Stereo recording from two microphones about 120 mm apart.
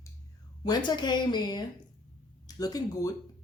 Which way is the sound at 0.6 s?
35° left (ahead or behind).